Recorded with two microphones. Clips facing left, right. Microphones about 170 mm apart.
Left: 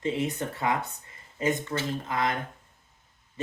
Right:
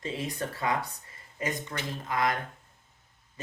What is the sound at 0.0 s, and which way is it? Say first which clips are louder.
Speech: left 5 dB; 25° left (ahead or behind).